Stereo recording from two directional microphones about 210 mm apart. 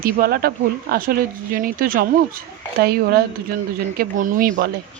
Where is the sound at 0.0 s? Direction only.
45° right (ahead or behind).